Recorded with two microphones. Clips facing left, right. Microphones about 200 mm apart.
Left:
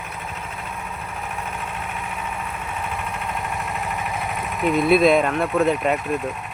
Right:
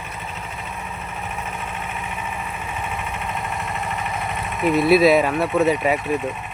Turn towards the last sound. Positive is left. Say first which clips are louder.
# right 1 dB
turn(degrees=0)  # may be behind; listen again after turning